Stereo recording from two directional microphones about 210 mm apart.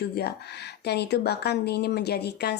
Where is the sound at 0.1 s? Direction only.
50° left (ahead or behind).